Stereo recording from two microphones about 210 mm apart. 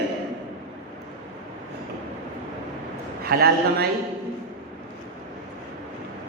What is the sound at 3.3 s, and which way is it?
Speech, 50° right (ahead or behind).